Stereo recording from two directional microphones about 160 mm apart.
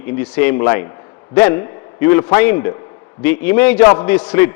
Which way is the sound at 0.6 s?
20° left (ahead or behind).